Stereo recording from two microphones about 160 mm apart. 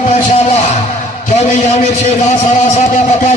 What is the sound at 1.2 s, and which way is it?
A man's voice, 45° left (ahead or behind).